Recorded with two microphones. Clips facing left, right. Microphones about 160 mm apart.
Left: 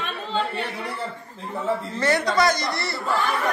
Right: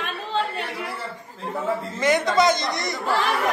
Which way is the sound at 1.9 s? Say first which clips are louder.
Right 2 dB; 20° right (ahead or behind).